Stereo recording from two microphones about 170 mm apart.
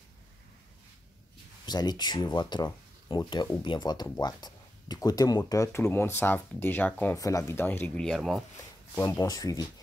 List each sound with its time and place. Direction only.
1.7 s speech: 25° left (ahead or behind); by 8.5 s centre (ahead or behind)
8.9 s speech: 15° left (ahead or behind)